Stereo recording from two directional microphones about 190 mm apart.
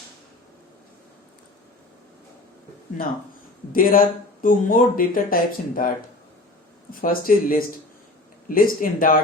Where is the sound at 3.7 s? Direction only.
50° left (ahead or behind).